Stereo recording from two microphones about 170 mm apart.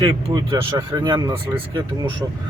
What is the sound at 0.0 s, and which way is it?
Speech, 25° right (ahead or behind).